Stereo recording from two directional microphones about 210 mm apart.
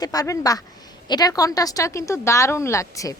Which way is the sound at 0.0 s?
15° left (ahead or behind).